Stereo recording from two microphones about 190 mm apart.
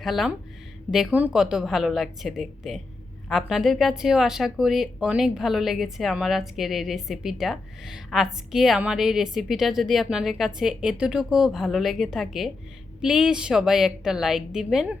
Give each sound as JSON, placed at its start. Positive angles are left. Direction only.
{"t": 0.0, "sound": "speech", "side_deg": 0}